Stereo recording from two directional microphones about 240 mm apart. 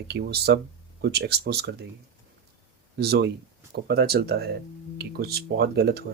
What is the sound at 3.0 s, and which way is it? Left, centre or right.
Speech, right.